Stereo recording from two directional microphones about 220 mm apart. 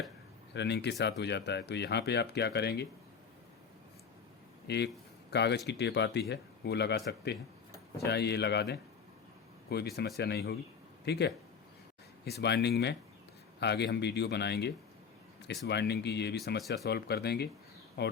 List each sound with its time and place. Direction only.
0.5 s speech: 50° left (ahead or behind)
4.7 s speech: 50° left (ahead or behind)